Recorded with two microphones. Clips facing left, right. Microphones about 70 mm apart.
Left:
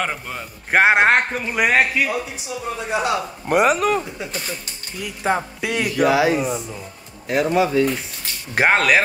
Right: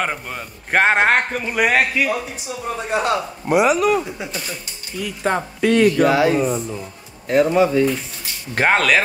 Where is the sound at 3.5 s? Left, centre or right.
Left.